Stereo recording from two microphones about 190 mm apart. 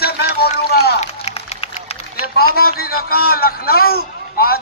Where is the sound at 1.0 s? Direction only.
35° left (ahead or behind).